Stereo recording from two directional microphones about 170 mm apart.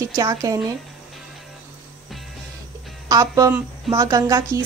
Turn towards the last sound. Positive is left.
turn(degrees=-20)  # may be behind; listen again after turning